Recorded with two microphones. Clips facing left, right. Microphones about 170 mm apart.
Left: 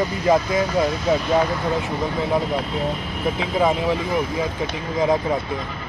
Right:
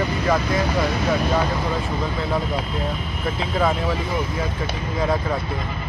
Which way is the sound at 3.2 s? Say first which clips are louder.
Left 2 dB; 15° left (ahead or behind).